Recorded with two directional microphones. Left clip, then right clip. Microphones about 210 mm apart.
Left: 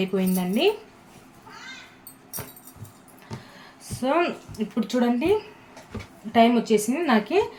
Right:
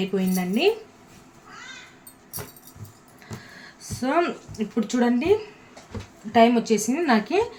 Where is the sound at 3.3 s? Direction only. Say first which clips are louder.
Even; 20° right (ahead or behind).